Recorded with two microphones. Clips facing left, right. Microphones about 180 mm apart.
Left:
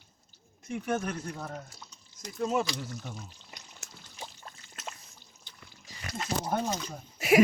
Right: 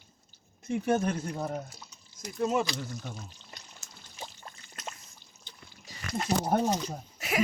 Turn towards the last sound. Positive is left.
turn(degrees=10)  # may be behind; listen again after turning